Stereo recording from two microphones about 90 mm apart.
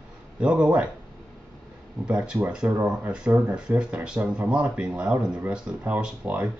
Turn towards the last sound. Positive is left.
turn(degrees=-15)  # may be behind; listen again after turning